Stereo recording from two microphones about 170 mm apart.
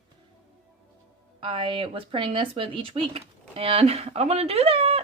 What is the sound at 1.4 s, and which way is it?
Speech, 30° right (ahead or behind).